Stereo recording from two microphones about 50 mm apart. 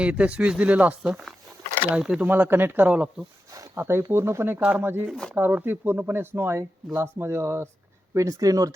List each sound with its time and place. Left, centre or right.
0.0 s speech: right
2.0 s speech: centre
2.2 s speech: right
2.8 s speech: right
3.8 s speech: right
4.8 s speech: right
6.3 s speech: right
8.1 s speech: right